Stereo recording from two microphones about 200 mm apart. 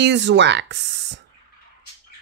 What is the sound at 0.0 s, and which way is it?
Speech, 60° right (ahead or behind).